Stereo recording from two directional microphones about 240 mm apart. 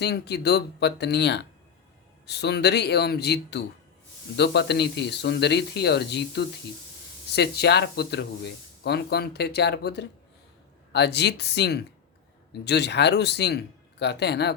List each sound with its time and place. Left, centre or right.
0.0 s speech: left